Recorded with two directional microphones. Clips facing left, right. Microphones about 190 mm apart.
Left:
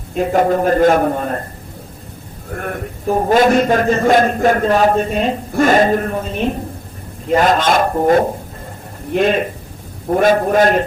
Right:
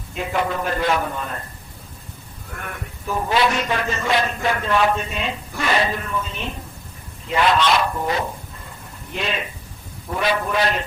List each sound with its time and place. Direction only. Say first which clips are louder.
0.1 s a man's voice: left 9 dB; 45° left (ahead or behind)
2.5 s a man's voice: left 10 dB; 45° left (ahead or behind)